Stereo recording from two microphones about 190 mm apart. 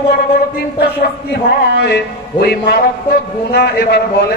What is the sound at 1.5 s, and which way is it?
Mantra, 60° left (ahead or behind).